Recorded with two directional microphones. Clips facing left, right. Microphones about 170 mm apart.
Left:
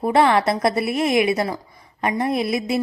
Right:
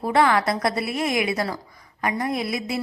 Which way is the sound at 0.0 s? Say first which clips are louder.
Left 3 dB; 25° left (ahead or behind).